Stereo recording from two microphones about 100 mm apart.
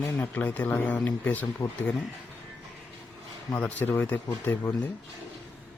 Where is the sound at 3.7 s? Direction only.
20° left (ahead or behind).